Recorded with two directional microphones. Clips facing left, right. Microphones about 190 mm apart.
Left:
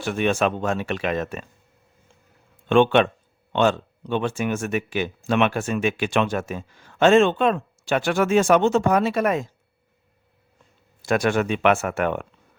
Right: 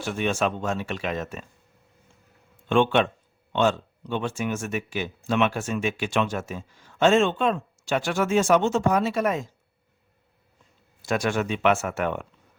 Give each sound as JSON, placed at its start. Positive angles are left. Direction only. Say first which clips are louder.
{"t": 0.0, "sound": "speech", "louder": "left 4 dB", "side_deg": 60}
{"t": 2.6, "sound": "speech", "louder": "left 4 dB", "side_deg": 70}
{"t": 11.0, "sound": "speech", "louder": "left 4 dB", "side_deg": 60}